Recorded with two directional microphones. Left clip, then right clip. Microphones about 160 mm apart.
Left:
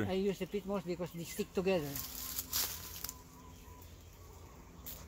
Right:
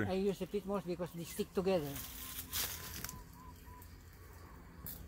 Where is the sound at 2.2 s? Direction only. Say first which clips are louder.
Left 3 dB; centre (ahead or behind).